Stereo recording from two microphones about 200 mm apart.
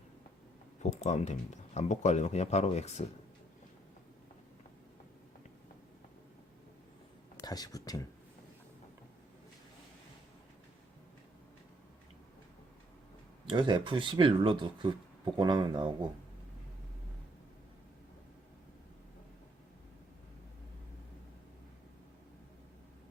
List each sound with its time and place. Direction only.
0.8 s speech: 35° left (ahead or behind)
7.3 s speech: 20° left (ahead or behind)
13.4 s speech: 25° right (ahead or behind)